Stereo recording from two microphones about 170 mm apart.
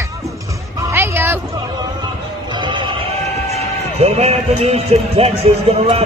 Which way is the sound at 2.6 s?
30° right (ahead or behind).